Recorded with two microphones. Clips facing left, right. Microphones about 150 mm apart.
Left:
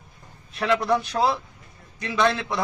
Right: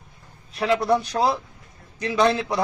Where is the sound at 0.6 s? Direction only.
35° right (ahead or behind).